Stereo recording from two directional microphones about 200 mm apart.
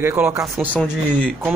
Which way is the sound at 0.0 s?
10° right (ahead or behind).